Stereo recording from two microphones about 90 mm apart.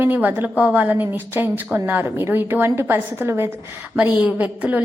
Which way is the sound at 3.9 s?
10° right (ahead or behind).